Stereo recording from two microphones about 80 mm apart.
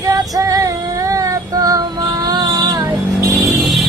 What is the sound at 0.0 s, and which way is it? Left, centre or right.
Female singing, right.